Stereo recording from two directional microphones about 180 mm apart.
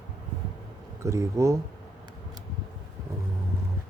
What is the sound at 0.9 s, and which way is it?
Speech, 15° right (ahead or behind).